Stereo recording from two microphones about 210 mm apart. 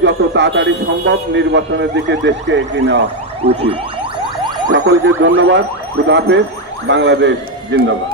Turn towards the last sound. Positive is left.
turn(degrees=-60)  # may be behind; listen again after turning